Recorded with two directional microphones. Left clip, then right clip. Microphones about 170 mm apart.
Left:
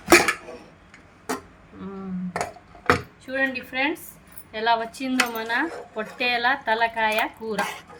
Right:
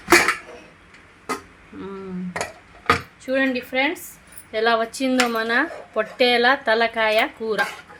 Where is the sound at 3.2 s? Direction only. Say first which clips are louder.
Right 4 dB; 60° right (ahead or behind).